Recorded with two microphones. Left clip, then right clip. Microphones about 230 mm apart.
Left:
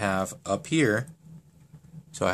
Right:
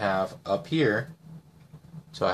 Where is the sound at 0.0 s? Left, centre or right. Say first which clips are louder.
Right 1 dB; left.